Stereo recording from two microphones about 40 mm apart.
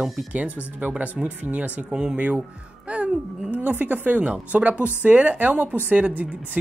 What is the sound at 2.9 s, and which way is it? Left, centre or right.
Music, right.